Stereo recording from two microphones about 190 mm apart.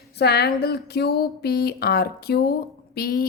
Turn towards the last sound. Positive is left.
turn(degrees=55)  # may be behind; listen again after turning